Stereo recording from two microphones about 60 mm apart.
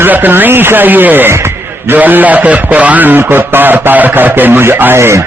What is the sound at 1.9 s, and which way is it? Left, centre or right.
A man's voice, right.